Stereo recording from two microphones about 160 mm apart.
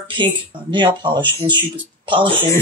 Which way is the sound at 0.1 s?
30° right (ahead or behind).